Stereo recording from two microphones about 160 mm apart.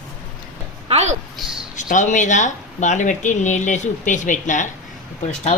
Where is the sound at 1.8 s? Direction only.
50° left (ahead or behind).